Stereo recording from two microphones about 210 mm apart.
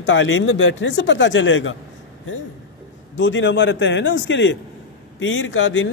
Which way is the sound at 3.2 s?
60° left (ahead or behind).